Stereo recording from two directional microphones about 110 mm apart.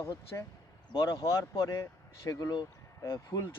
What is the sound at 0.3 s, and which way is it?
Speech, 25° left (ahead or behind).